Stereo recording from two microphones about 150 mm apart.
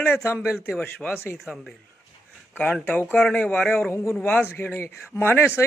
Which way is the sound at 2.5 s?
10° left (ahead or behind).